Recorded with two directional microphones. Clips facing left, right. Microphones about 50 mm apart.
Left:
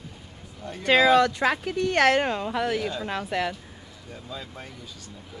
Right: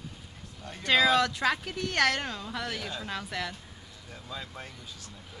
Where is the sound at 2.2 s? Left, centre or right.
Left.